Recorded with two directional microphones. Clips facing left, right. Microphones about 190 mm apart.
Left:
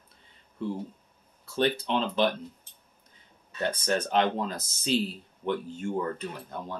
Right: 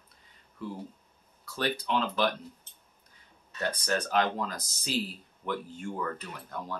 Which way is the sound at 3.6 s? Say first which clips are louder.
Left 3 dB; 25° left (ahead or behind).